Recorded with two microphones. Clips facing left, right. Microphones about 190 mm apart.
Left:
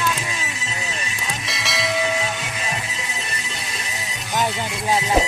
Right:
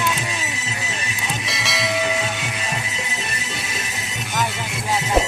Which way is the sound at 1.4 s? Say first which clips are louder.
Even; centre (ahead or behind).